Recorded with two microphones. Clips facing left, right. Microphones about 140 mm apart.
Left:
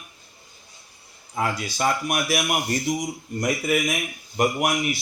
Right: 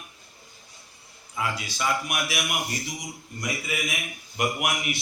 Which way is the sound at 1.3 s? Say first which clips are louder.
Left 5 dB; 45° left (ahead or behind).